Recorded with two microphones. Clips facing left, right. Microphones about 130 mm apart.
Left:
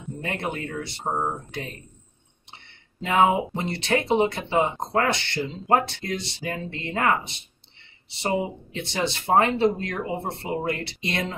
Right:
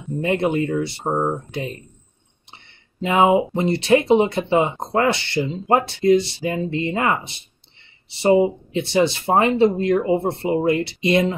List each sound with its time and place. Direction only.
0.2 s speech: 15° right (ahead or behind)
0.7 s speech: 10° right (ahead or behind)
3.1 s speech: 10° right (ahead or behind)